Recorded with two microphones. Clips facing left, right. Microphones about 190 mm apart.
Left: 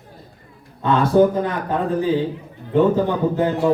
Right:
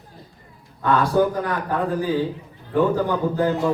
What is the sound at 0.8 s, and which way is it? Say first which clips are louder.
A man's voice: left 4 dB; 25° left (ahead or behind).